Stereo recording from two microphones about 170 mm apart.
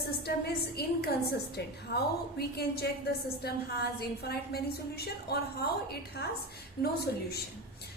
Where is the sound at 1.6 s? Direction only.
80° left.